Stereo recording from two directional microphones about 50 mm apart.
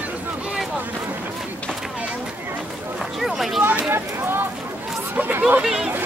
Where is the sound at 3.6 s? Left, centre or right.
Right.